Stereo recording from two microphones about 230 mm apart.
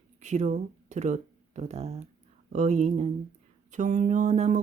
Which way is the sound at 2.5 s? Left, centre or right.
Right.